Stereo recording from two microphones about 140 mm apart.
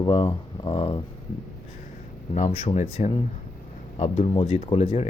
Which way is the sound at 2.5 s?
50° left (ahead or behind).